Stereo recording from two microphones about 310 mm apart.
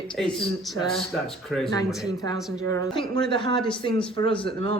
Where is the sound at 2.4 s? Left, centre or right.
Centre.